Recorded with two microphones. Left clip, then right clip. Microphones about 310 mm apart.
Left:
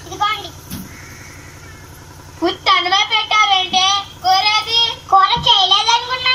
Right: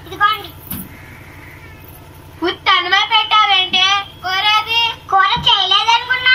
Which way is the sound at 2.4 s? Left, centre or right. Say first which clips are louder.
Even; centre.